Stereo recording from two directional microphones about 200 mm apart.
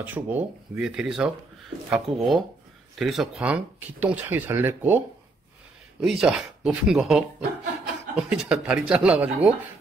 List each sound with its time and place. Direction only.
0.0 s speech: 10° right (ahead or behind)